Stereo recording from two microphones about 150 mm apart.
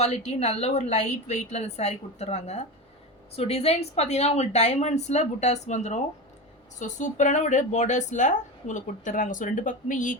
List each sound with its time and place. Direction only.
0.0 s a woman's voice: 45° left (ahead or behind)